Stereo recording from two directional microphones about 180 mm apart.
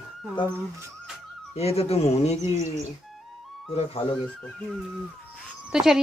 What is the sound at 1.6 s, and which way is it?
Speech, 35° left (ahead or behind).